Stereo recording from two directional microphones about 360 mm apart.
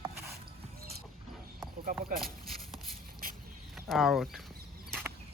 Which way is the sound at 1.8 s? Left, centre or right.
Right.